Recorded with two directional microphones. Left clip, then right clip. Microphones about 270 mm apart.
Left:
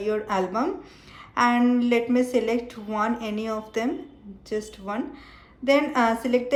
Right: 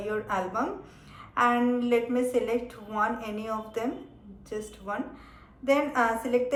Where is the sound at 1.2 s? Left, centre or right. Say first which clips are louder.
Left 3 dB; left.